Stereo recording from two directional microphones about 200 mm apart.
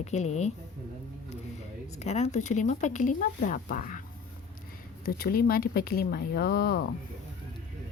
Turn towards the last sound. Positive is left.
turn(degrees=50)  # may be behind; listen again after turning